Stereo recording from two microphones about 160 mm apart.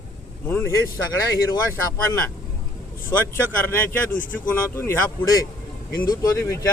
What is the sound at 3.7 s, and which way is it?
Speech, 10° left (ahead or behind).